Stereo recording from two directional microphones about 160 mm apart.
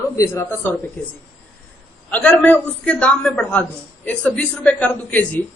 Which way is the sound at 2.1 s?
10° left (ahead or behind).